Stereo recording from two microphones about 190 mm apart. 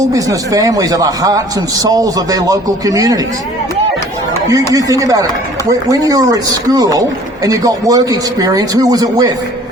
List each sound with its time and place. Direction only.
0.0 s a man's voice: 20° right (ahead or behind)
4.7 s a man's voice: 20° right (ahead or behind)